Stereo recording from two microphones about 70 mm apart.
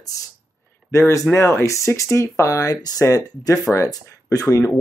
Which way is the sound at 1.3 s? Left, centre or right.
Left.